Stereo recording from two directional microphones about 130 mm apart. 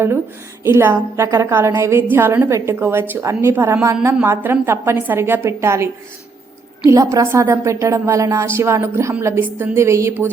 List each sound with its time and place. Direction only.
0.6 s a woman's voice: 20° right (ahead or behind)
6.9 s a woman's voice: 25° right (ahead or behind)